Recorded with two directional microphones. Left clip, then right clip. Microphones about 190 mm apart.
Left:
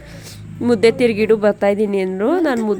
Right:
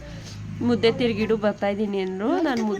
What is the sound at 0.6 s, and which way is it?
Speech, 35° left (ahead or behind).